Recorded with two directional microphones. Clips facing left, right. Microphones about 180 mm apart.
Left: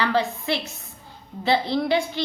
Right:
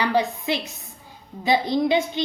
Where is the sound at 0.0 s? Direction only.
15° right (ahead or behind).